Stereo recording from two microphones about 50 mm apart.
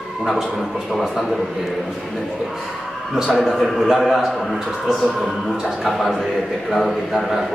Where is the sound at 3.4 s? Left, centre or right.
Centre.